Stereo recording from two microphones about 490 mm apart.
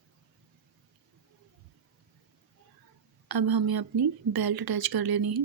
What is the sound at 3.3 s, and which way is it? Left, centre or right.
Speech, right.